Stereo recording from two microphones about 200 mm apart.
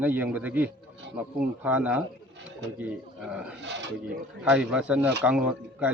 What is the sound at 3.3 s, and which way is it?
A man's voice, 5° right (ahead or behind).